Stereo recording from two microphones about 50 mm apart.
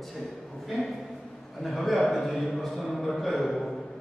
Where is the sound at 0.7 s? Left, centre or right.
Centre.